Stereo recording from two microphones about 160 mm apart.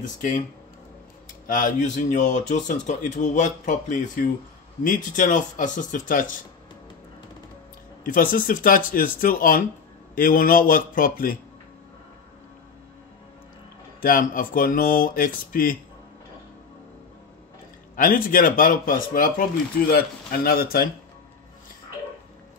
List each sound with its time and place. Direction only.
0.0 s speech: 50° left (ahead or behind)
1.5 s speech: 55° left (ahead or behind)
8.0 s speech: 60° left (ahead or behind)
14.0 s speech: 60° left (ahead or behind)
17.9 s speech: 60° left (ahead or behind)